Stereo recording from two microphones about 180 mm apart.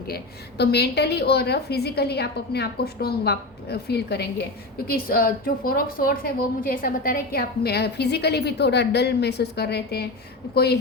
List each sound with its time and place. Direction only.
0.1 s a woman's voice: 65° left (ahead or behind)